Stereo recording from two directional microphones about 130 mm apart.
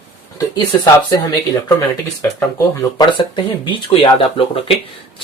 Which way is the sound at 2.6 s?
30° left (ahead or behind).